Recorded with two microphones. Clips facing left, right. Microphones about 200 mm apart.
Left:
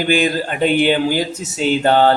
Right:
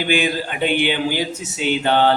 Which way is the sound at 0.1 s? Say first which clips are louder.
Left 3 dB; 45° left (ahead or behind).